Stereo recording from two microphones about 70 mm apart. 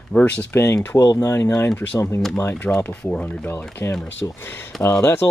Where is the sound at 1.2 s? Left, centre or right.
Left.